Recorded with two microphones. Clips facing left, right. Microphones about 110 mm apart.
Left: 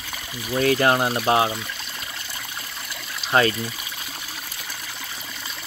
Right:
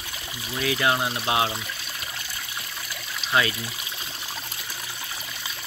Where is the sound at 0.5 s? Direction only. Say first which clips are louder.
Left 5 dB; 45° left (ahead or behind).